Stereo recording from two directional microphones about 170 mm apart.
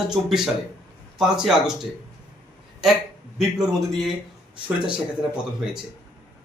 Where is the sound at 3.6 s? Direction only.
Centre (ahead or behind).